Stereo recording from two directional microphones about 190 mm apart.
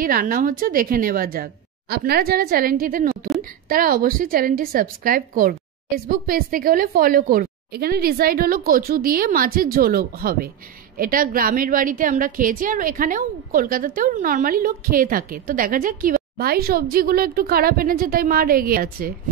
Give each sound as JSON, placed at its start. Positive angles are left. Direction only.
{"t": 0.0, "sound": "a woman's voice", "side_deg": -45}